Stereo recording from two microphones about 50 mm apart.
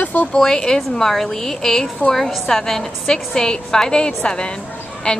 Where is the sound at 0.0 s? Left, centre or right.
Left.